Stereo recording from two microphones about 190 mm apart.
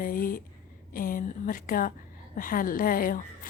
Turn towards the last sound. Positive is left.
turn(degrees=50)  # may be behind; listen again after turning